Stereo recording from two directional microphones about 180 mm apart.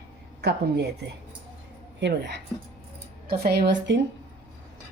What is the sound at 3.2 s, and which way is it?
Speech, 60° right (ahead or behind).